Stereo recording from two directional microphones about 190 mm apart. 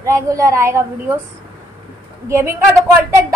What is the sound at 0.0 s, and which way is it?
Speech, 15° right (ahead or behind).